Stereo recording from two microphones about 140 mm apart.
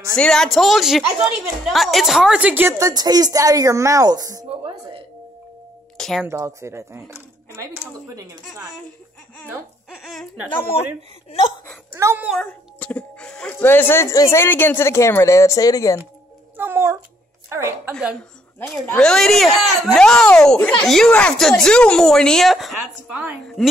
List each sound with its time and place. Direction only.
0.1 s a child's voice: 5° left (ahead or behind); by 2.9 s 15° right (ahead or behind)
2.9 s a woman's voice: 30° right (ahead or behind)
5.9 s a sound: centre (ahead or behind)
6.2 s a woman's voice: 20° right (ahead or behind)
9.5 s speech: 5° right (ahead or behind)
11.2 s speech: 45° left (ahead or behind)
11.9 s a child's voice: 20° right (ahead or behind)
12.3 s speech: 5° left (ahead or behind); by 16.0 s 25° left (ahead or behind)
16.5 s a woman's voice: 15° right (ahead or behind)
18.9 s a child's voice: 5° left (ahead or behind)